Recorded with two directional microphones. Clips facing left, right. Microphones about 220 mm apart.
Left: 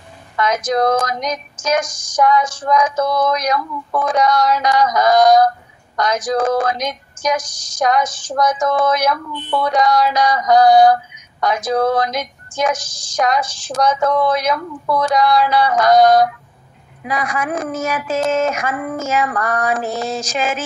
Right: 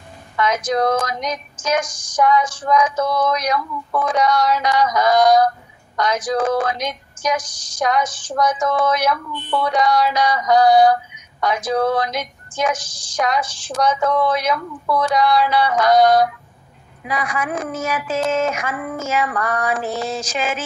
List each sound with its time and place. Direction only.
0.4 s a woman's voice: 45° left (ahead or behind)